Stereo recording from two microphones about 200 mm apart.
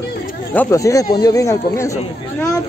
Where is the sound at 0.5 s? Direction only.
10° left (ahead or behind).